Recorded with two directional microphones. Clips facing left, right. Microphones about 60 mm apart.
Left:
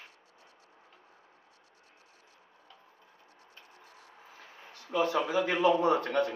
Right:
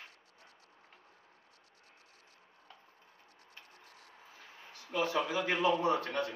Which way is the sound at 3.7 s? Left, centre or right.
Left.